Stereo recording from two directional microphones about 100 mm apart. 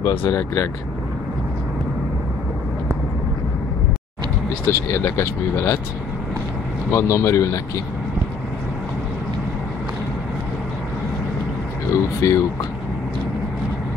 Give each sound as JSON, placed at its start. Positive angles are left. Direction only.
{"t": 0.3, "sound": "speech", "side_deg": 30}
{"t": 4.6, "sound": "speech", "side_deg": 25}
{"t": 6.9, "sound": "speech", "side_deg": 30}
{"t": 11.9, "sound": "speech", "side_deg": 30}